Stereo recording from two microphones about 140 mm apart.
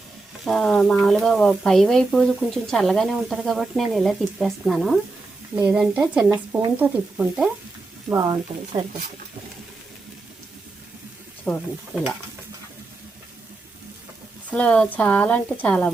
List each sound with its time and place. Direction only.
0.4 s speech: 5° left (ahead or behind)
5.6 s stir: 10° right (ahead or behind)
8.1 s speech: 25° right (ahead or behind)
11.5 s speech: 10° left (ahead or behind)
14.5 s speech: 10° left (ahead or behind)